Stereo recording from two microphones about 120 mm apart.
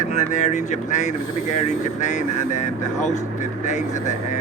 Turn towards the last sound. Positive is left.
turn(degrees=85)